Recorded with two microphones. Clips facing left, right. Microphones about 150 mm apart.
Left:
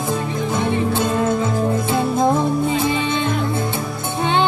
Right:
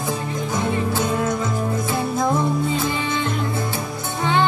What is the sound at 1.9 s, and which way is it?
Music, 25° left (ahead or behind).